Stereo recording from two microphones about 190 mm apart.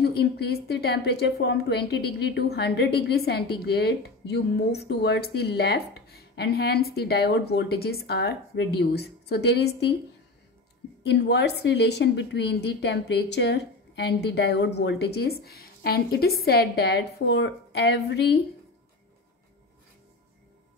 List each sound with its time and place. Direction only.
0.0 s a woman's voice: 60° left (ahead or behind)
11.1 s a woman's voice: 65° left (ahead or behind)